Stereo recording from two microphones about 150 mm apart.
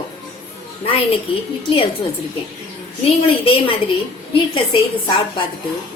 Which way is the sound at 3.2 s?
40° left (ahead or behind).